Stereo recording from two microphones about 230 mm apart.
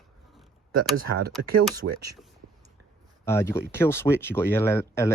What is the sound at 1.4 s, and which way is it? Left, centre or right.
Speech, right.